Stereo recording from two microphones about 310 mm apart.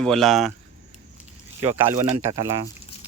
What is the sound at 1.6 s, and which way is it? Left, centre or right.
Speech, centre.